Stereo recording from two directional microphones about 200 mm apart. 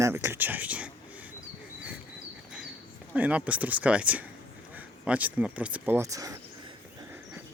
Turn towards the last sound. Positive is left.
turn(degrees=-15)  # may be behind; listen again after turning